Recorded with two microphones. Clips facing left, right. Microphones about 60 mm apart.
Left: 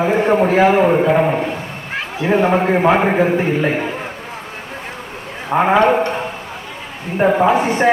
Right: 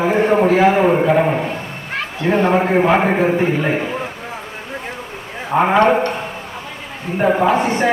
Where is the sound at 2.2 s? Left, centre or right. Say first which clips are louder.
Left 1 dB; centre.